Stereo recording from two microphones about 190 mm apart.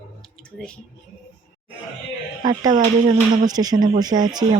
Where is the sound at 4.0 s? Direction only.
20° right (ahead or behind).